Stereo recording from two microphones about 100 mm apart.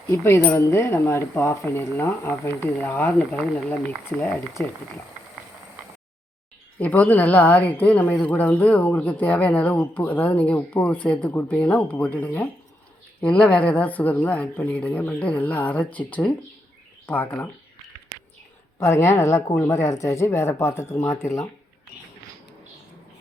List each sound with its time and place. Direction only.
0.1 s speech: 25° left (ahead or behind)
6.7 s speech: 15° left (ahead or behind)
18.8 s speech: 25° left (ahead or behind)